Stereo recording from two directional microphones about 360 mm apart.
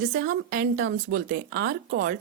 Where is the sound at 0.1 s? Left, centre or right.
Right.